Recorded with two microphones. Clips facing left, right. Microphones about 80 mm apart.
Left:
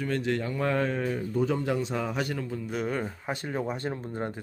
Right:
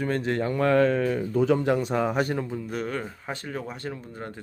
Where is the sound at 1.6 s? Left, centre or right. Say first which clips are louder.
Right 5 dB; right.